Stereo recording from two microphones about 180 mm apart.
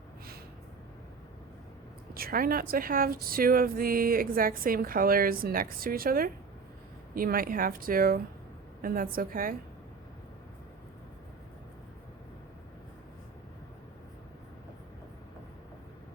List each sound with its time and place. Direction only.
2.1 s speech: 55° right (ahead or behind)